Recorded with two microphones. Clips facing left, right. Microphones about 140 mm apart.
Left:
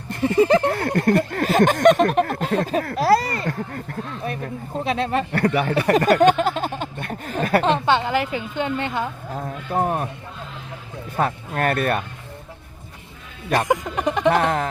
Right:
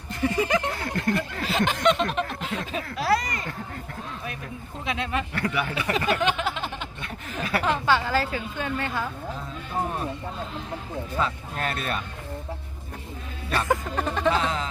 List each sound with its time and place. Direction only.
0.2 s speech: 30° left (ahead or behind)
0.7 s speech: 60° left (ahead or behind); by 3.5 s 35° left (ahead or behind)
4.8 s speech: 35° left (ahead or behind)
7.6 s a woman's voice: 25° left (ahead or behind)
9.3 s a sound: 55° left (ahead or behind)
11.2 s speech: 55° left (ahead or behind)
13.7 s music: 15° left (ahead or behind)
14.3 s speech: 60° left (ahead or behind)